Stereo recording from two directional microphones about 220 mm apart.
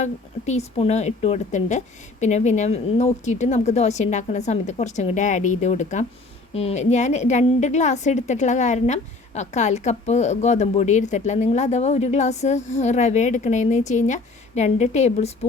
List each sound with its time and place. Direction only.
0.0 s a woman's voice: 30° left (ahead or behind)